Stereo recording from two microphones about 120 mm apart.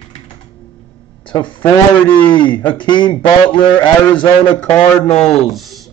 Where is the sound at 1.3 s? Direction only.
15° left (ahead or behind).